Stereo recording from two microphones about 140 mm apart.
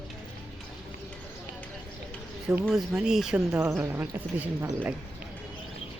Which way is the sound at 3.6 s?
20° right (ahead or behind).